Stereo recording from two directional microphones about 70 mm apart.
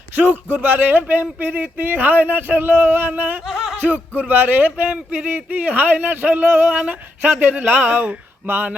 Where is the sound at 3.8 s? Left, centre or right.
Right.